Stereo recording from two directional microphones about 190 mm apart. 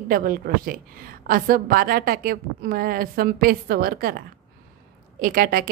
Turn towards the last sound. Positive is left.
turn(degrees=-50)  # may be behind; listen again after turning